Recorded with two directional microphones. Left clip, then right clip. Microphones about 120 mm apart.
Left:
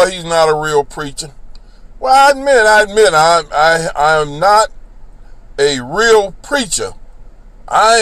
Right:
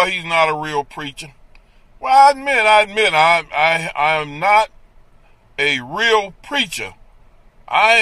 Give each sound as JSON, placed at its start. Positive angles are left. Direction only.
{"t": 0.0, "sound": "speech", "side_deg": -30}
{"t": 2.5, "sound": "speech", "side_deg": -30}